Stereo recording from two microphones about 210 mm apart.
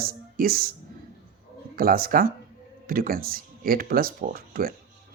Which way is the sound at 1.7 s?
45° right (ahead or behind).